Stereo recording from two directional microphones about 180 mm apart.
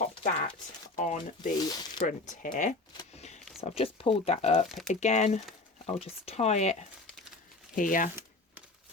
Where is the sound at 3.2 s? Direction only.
35° left (ahead or behind).